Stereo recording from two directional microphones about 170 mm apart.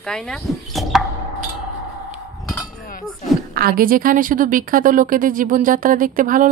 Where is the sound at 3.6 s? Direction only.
60° right (ahead or behind).